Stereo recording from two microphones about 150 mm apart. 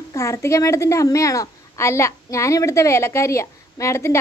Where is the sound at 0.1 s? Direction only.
20° left (ahead or behind).